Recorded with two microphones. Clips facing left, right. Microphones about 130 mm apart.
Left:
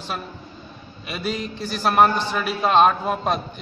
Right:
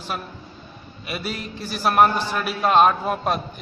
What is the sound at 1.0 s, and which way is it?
A man's voice, 5° right (ahead or behind).